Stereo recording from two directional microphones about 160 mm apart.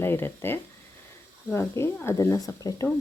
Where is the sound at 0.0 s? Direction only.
15° left (ahead or behind).